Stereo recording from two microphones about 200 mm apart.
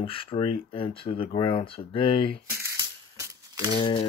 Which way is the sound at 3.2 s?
15° right (ahead or behind).